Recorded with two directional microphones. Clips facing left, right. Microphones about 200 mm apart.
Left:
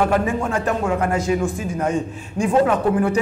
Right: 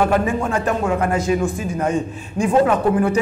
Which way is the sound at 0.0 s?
15° right (ahead or behind).